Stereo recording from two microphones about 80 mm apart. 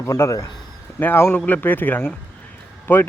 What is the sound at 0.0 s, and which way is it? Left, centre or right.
Speech, left.